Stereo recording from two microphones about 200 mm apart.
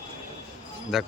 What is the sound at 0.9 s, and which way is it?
Speech, centre (ahead or behind).